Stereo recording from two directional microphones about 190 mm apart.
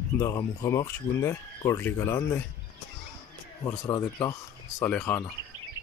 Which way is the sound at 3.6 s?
15° left (ahead or behind).